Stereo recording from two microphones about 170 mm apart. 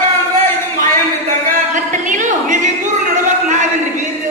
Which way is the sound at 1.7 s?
50° right (ahead or behind).